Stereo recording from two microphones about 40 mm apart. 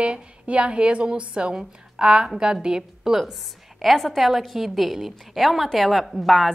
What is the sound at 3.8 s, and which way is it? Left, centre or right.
A woman's voice, centre.